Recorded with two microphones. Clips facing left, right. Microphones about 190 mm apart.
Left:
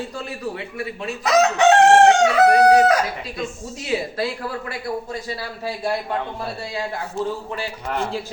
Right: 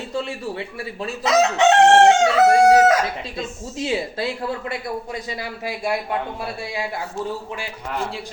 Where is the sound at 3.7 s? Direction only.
25° right (ahead or behind).